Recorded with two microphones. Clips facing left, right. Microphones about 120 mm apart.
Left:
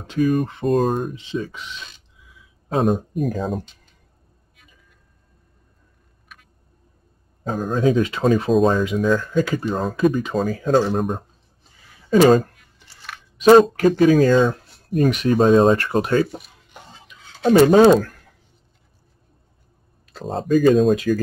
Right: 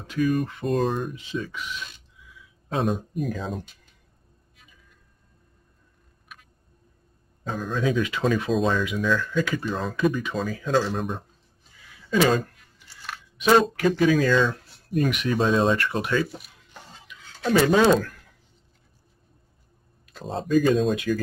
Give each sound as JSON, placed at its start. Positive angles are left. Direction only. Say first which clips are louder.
{"t": 0.2, "sound": "speech", "louder": "left 4 dB", "side_deg": 40}
{"t": 1.1, "sound": "speech", "louder": "left 4 dB", "side_deg": 25}
{"t": 2.7, "sound": "speech", "louder": "left 6 dB", "side_deg": 45}
{"t": 7.4, "sound": "speech", "louder": "left 6 dB", "side_deg": 45}
{"t": 17.5, "sound": "speech", "louder": "left 7 dB", "side_deg": 40}
{"t": 20.1, "sound": "speech", "louder": "left 5 dB", "side_deg": 40}